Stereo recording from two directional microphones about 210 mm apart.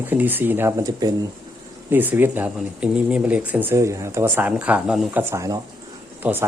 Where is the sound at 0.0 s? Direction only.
10° right (ahead or behind).